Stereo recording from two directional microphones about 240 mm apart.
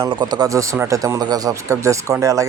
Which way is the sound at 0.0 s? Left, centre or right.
Centre.